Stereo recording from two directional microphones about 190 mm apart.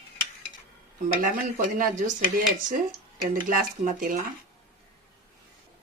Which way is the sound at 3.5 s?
45° right (ahead or behind).